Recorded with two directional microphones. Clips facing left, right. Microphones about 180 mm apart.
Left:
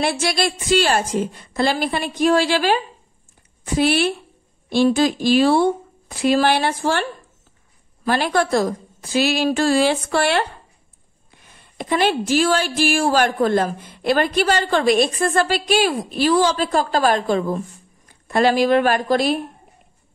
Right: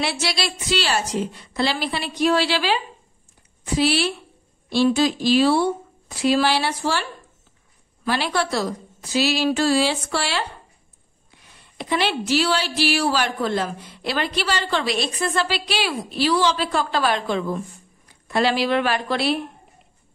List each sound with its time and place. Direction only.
0.0 s a woman's voice: 50° left (ahead or behind)
11.8 s a woman's voice: 45° left (ahead or behind)